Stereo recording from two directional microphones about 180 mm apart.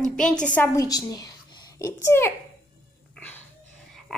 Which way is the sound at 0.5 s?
20° left (ahead or behind).